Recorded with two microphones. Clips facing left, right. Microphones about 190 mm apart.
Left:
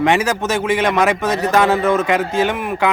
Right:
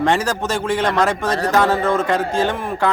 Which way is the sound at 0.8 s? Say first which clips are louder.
Left 2 dB; 20° left (ahead or behind).